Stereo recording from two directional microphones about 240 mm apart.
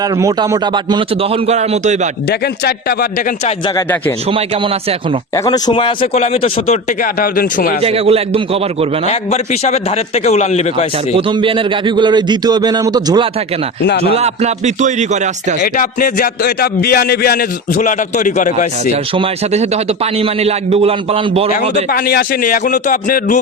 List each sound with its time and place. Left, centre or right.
0.2 s a man's voice: centre; by 2.0 s right
5.5 s speech: centre
7.0 s a man's voice: left
7.8 s a man's voice: right
9.0 s speech: left
11.3 s a man's voice: right
15.6 s a man's voice: left
19.1 s a man's voice: right
21.9 s a man's voice: left